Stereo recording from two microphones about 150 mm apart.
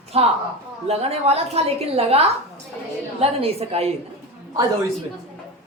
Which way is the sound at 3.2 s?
40° right (ahead or behind).